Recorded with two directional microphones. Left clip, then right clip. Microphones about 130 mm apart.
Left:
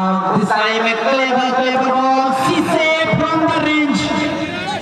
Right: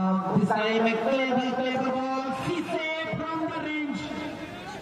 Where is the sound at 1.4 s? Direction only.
5° left (ahead or behind); by 4.3 s 25° left (ahead or behind).